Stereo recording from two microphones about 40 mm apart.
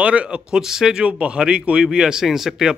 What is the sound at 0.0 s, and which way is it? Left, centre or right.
Speech, right.